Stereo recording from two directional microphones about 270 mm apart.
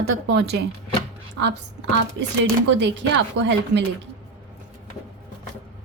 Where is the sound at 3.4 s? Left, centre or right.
Right.